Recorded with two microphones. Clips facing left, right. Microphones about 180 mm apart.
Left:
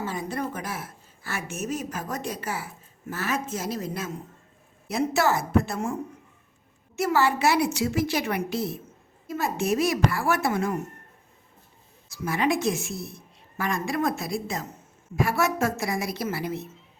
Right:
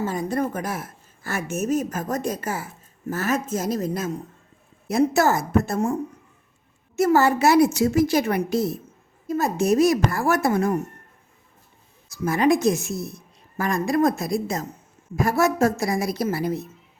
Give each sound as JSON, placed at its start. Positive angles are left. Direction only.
{"t": 0.0, "sound": "a woman's voice", "side_deg": -45}
{"t": 12.2, "sound": "a woman's voice", "side_deg": -45}